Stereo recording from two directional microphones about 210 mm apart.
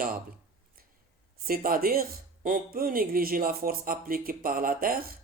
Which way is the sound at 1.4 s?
45° right (ahead or behind).